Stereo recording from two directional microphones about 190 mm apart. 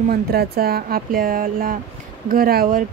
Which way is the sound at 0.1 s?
55° right (ahead or behind).